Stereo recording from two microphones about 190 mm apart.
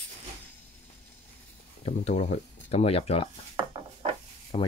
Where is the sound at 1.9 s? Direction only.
40° left (ahead or behind).